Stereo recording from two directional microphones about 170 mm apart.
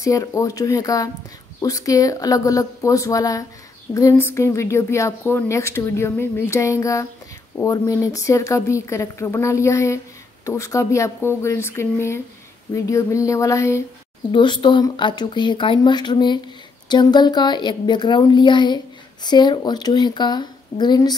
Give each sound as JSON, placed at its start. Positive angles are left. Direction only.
{"t": 0.0, "sound": "speech", "side_deg": 20}
{"t": 14.3, "sound": "speech", "side_deg": 25}